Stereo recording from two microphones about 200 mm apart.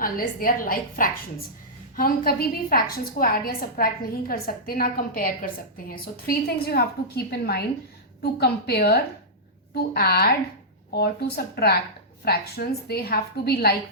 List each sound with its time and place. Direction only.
0.0 s a woman's voice: 45° left (ahead or behind)